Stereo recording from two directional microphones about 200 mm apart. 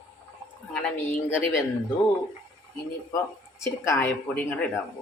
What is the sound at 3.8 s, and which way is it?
Speech, 10° left (ahead or behind).